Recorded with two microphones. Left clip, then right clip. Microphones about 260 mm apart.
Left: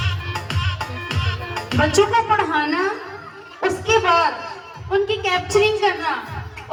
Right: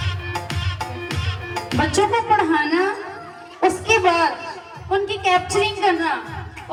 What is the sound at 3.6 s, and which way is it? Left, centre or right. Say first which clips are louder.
A woman's voice: right 1 dB; right.